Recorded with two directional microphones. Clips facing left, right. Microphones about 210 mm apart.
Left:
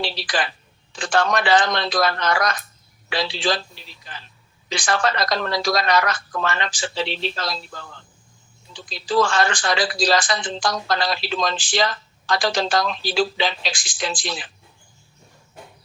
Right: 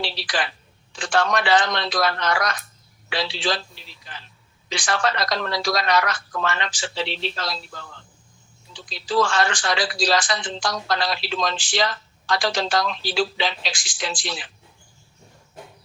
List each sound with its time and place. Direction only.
0.0 s a sound: 45° left (ahead or behind)
1.0 s speech: 50° left (ahead or behind)
8.9 s speech: 45° left (ahead or behind)